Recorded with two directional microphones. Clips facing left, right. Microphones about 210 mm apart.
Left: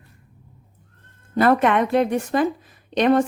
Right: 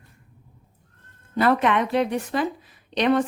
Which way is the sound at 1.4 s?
50° left (ahead or behind).